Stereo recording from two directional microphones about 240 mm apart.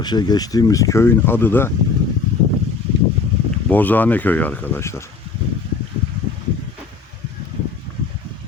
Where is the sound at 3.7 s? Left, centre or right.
Centre.